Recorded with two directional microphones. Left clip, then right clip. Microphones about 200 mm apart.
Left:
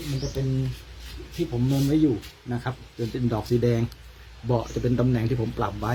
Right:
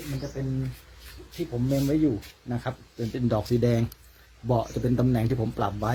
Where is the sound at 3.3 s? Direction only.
55° right (ahead or behind).